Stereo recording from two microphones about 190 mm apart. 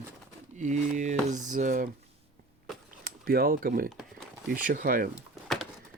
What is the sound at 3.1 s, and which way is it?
Speech, 55° right (ahead or behind).